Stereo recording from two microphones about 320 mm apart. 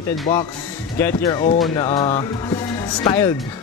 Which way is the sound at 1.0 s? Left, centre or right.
Centre.